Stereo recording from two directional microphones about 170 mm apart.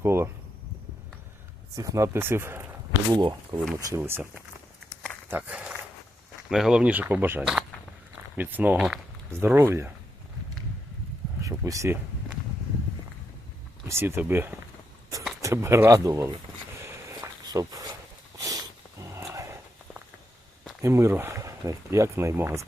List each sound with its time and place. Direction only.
0.0 s speech: 15° right (ahead or behind)
1.7 s speech: 20° right (ahead or behind)
3.1 s speech: 25° right (ahead or behind)
11.4 s speech: 20° right (ahead or behind)
13.8 s speech: 15° right (ahead or behind)
16.8 s walk: 15° right (ahead or behind)
18.4 s a sound: 20° right (ahead or behind)
20.8 s speech: 15° right (ahead or behind)